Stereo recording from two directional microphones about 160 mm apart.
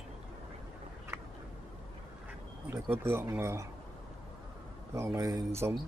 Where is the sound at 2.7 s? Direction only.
15° right (ahead or behind).